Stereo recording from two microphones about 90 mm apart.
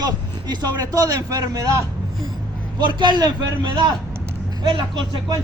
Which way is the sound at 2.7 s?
55° right (ahead or behind).